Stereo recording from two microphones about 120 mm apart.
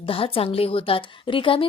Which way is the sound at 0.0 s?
50° left (ahead or behind).